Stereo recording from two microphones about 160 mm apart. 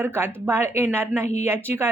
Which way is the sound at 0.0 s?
15° right (ahead or behind).